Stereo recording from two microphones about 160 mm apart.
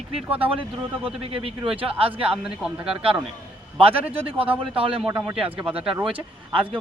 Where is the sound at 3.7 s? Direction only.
35° right (ahead or behind).